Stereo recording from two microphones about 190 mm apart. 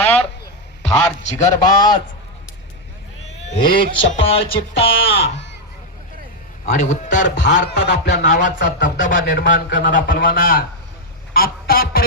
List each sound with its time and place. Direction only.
0.0 s a sound: 5° left (ahead or behind)
1.2 s a man's voice: 40° left (ahead or behind)
1.6 s music: 20° left (ahead or behind)
3.4 s speech: 30° left (ahead or behind)
4.1 s music: 30° left (ahead or behind)
6.7 s a man's voice: 40° left (ahead or behind)
7.3 s speech: 65° left (ahead or behind)
8.3 s a man's voice: 45° left (ahead or behind)